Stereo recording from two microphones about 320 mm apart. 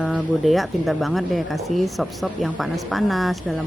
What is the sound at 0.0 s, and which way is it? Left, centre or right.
A woman's voice, centre.